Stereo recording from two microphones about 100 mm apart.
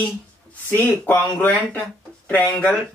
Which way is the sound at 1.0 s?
15° left (ahead or behind).